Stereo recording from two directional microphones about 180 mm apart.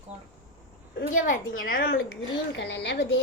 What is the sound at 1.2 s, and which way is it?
Speech, 50° left (ahead or behind).